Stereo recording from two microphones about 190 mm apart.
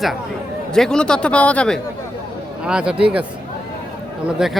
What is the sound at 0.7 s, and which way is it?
A man's voice, 5° left (ahead or behind).